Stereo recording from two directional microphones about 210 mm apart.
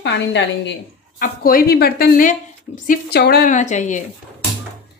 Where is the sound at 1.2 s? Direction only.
45° left (ahead or behind).